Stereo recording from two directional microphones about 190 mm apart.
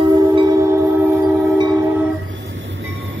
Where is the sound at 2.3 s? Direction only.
75° right (ahead or behind).